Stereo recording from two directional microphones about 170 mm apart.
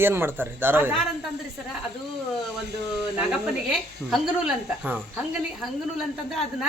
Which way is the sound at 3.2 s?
5° right (ahead or behind).